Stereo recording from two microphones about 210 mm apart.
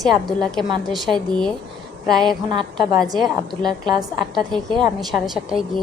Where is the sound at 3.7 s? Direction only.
20° right (ahead or behind).